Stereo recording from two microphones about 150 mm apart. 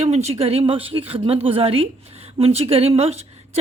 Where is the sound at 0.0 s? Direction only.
50° right (ahead or behind).